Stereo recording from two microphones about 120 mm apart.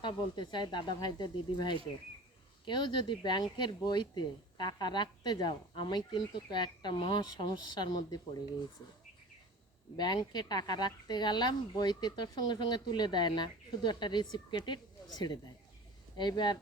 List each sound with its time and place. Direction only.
0.0 s speech: 40° left (ahead or behind)
10.0 s speech: 35° left (ahead or behind)